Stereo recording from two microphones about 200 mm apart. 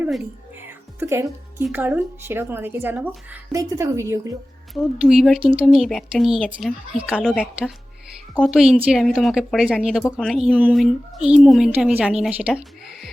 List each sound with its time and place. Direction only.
0.9 s a woman's voice: 15° right (ahead or behind)
4.7 s speech: centre (ahead or behind)